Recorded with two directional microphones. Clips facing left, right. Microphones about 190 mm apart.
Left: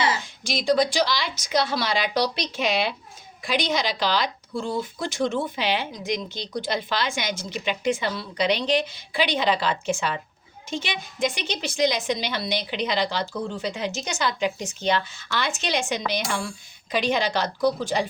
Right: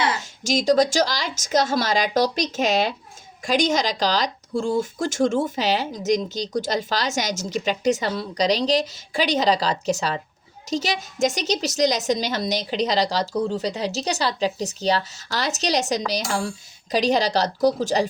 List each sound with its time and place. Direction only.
0.0 s a woman's voice: 50° right (ahead or behind)